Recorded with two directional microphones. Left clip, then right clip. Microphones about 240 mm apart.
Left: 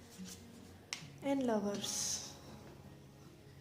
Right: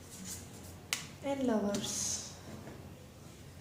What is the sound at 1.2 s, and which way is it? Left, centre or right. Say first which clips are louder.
Speech: right 1 dB; left.